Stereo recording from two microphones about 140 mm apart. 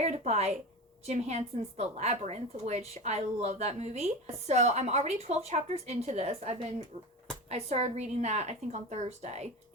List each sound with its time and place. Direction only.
0.0 s a woman's voice: 50° right (ahead or behind)